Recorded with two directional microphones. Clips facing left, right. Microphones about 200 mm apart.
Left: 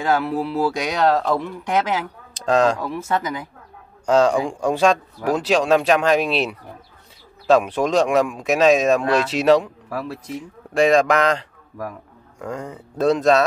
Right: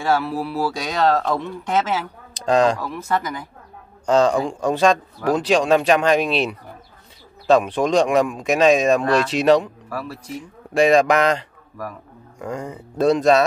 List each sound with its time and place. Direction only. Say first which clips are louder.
0.2 s speech: left 2 dB; 20° left (ahead or behind)
2.3 s speech: even; centre (ahead or behind)
4.0 s speech: even; 10° left (ahead or behind)
9.9 s speech: left 2 dB; 20° left (ahead or behind)
10.7 s speech: right 1 dB; centre (ahead or behind)